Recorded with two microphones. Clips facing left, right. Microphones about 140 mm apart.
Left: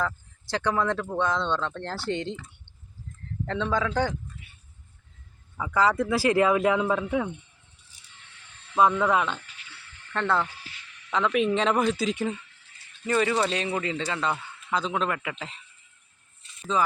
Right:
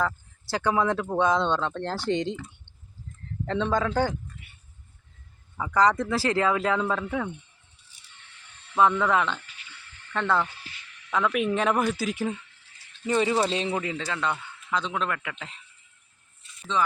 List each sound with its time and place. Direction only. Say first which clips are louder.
0.5 s speech: right 1 dB; 5° right (ahead or behind)
3.4 s speech: right 2 dB; 20° right (ahead or behind)
5.5 s speech: right 1 dB; 5° left (ahead or behind)
8.7 s speech: even; 15° left (ahead or behind)
10.1 s a man's voice: even; 5° left (ahead or behind)
13.1 s speech: even; 20° right (ahead or behind)
13.4 s speech: right 1 dB; 30° right (ahead or behind)
13.8 s a man's voice: left 1 dB; centre (ahead or behind)